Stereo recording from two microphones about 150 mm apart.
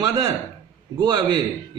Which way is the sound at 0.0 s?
25° right (ahead or behind).